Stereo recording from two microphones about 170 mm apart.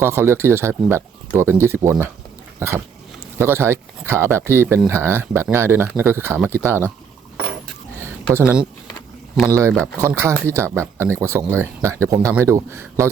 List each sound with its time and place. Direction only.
0.0 s speech: 15° right (ahead or behind)
8.0 s a sound: 15° right (ahead or behind)
9.5 s speech: 15° right (ahead or behind)